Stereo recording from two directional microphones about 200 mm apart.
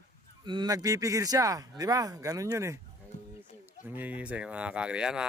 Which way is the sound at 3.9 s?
10° right (ahead or behind).